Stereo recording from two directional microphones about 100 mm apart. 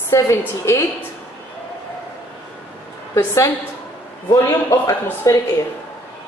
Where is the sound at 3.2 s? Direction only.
30° left (ahead or behind).